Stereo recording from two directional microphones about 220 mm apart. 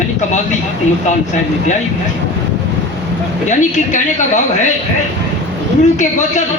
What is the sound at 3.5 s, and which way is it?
A woman's voice, 35° left (ahead or behind).